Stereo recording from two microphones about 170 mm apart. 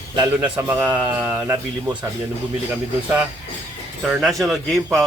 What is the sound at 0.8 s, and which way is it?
Speech, 25° right (ahead or behind).